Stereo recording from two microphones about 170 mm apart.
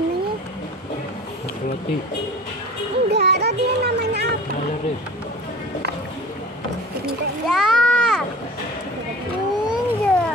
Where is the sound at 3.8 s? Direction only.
80° right.